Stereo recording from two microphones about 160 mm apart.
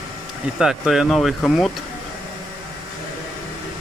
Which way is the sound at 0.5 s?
5° right (ahead or behind).